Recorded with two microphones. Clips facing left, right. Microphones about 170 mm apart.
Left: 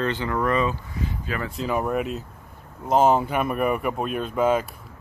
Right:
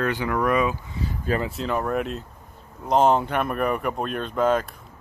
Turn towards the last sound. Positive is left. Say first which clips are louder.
# even
turn(degrees=5)  # may be behind; listen again after turning